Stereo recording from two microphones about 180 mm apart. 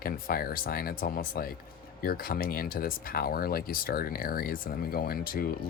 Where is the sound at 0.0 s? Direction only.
55° left (ahead or behind).